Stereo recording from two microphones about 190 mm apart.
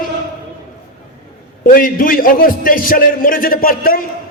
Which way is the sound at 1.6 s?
45° left (ahead or behind).